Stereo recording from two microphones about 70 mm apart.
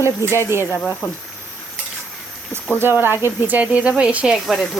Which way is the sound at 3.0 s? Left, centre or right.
Right.